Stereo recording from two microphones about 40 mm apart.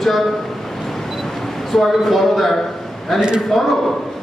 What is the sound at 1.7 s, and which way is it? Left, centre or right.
A man's voice, centre.